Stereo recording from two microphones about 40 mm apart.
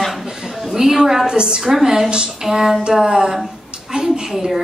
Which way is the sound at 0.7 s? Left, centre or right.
Centre.